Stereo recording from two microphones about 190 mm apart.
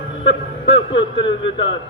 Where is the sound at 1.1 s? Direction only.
70° left (ahead or behind).